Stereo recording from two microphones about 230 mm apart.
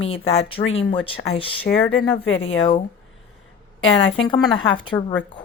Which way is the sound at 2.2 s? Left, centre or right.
Left.